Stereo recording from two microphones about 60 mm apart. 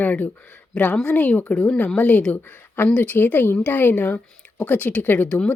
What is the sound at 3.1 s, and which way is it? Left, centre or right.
Speech, left.